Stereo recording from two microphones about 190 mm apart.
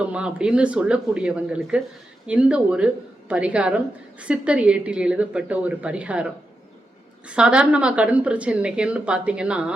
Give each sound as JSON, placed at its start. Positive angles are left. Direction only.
{"t": 0.0, "sound": "a woman's voice", "side_deg": -5}